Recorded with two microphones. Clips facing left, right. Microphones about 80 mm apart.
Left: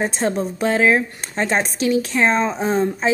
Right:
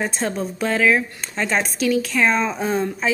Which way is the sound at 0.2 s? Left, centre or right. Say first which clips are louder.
Left 5 dB; left.